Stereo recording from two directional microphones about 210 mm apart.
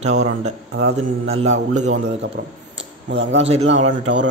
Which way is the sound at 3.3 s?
30° right (ahead or behind).